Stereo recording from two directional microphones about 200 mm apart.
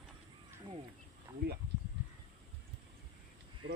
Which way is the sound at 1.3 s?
10° right (ahead or behind).